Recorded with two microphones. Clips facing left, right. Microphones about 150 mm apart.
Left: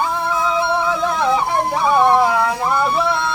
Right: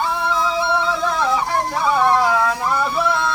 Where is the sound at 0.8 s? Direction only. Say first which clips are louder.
Left 2 dB; 15° left (ahead or behind).